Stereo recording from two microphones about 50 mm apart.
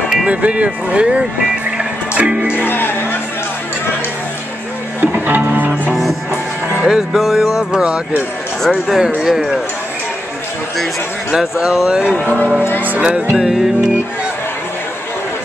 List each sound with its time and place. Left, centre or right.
0.3 s speech: right
2.5 s speech: left
5.0 s music: right
6.8 s speech: centre
11.3 s speech: centre
13.1 s music: centre
13.5 s speech: centre